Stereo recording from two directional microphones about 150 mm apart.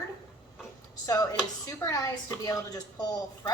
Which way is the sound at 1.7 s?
20° left (ahead or behind).